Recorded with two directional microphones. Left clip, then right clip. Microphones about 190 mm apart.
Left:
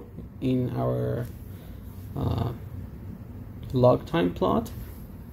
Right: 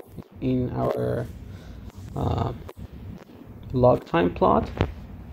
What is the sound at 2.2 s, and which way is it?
Speech, 10° right (ahead or behind).